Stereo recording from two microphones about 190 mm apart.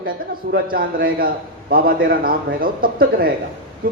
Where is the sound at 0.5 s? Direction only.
55° right (ahead or behind).